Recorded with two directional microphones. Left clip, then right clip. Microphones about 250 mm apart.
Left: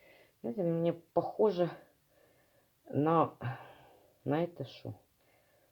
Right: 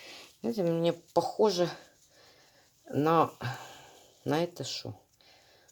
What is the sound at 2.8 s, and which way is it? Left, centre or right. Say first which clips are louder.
Speech: right 3 dB; centre.